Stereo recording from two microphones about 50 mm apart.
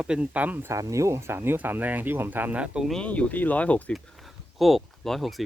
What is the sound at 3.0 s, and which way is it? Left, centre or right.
Speech, left.